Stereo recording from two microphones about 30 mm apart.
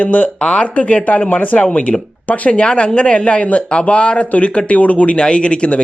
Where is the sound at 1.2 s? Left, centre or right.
Left.